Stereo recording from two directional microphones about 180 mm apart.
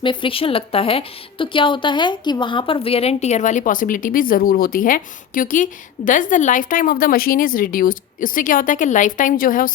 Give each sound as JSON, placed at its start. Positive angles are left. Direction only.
{"t": 0.0, "sound": "a woman's voice", "side_deg": 30}